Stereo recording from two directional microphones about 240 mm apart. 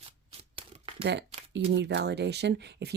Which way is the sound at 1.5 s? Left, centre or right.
Right.